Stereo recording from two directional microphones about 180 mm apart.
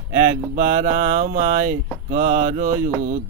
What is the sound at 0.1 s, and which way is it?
Speech, 45° right (ahead or behind).